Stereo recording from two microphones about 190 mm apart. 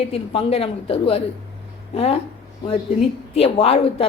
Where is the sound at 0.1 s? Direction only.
30° left (ahead or behind).